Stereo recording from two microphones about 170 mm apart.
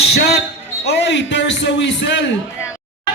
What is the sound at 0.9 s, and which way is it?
A man's voice, 90° left.